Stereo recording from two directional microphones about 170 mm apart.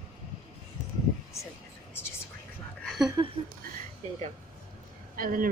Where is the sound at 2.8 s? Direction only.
Centre (ahead or behind).